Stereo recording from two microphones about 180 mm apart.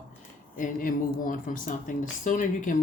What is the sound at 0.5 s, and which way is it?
Speech, 50° left (ahead or behind).